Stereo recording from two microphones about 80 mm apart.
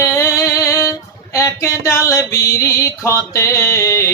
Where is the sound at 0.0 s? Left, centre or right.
Left.